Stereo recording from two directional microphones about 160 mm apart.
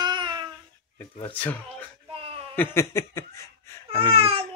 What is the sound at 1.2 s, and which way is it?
Speech, 10° left (ahead or behind).